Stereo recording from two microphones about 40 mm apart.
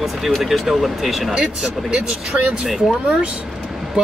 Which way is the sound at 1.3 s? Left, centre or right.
Right.